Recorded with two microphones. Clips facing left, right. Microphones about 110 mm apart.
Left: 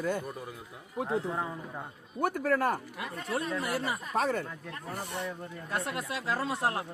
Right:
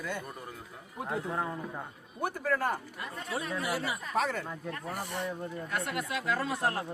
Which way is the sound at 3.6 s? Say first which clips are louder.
Left 1 dB; 45° left (ahead or behind).